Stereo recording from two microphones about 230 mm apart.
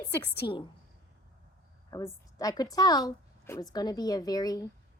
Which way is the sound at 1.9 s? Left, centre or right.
Centre.